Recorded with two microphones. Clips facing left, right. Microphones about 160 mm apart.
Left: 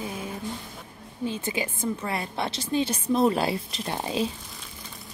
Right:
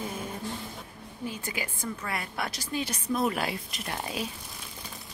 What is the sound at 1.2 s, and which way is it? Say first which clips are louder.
A woman's voice: left 6 dB; 25° left (ahead or behind).